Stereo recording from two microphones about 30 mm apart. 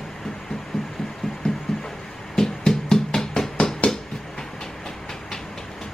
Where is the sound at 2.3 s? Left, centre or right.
Centre.